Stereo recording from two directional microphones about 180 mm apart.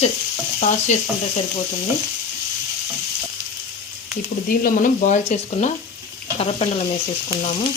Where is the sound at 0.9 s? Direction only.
40° left (ahead or behind).